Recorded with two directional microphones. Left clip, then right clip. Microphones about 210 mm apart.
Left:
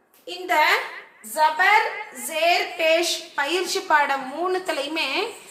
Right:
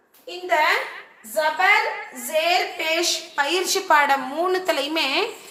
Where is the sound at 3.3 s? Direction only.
Centre (ahead or behind).